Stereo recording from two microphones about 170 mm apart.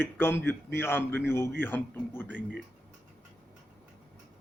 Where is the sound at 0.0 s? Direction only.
10° left (ahead or behind).